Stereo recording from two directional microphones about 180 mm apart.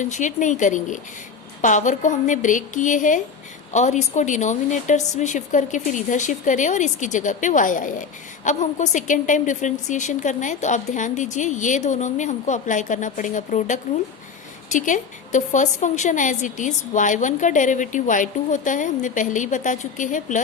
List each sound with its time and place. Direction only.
0.0 s a woman's voice: 45° left (ahead or behind)